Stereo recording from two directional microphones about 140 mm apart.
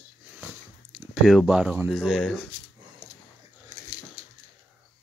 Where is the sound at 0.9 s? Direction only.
Centre (ahead or behind).